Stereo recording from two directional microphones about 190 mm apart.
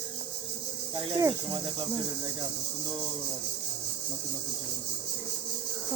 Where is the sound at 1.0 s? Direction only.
25° right (ahead or behind).